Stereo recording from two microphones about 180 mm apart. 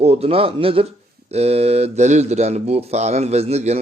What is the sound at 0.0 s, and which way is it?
Speech, 35° right (ahead or behind).